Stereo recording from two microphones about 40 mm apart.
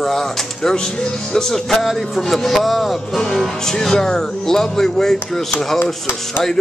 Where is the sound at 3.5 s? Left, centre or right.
Centre.